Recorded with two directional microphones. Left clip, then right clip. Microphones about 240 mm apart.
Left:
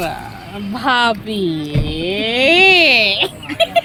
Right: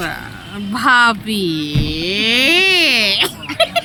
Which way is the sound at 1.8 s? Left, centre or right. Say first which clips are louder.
Right 1 dB; centre.